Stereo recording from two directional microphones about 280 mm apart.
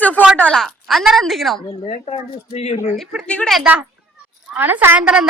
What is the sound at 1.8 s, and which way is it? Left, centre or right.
Speech, left.